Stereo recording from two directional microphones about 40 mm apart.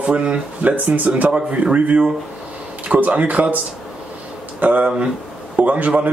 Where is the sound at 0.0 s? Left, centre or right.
Right.